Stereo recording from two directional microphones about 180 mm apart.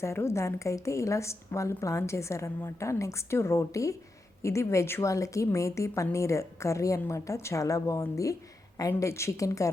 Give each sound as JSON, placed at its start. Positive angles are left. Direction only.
{"t": 0.0, "sound": "a woman's voice", "side_deg": 15}